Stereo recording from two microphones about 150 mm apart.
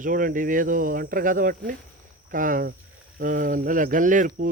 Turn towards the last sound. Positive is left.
turn(degrees=-60)  # may be behind; listen again after turning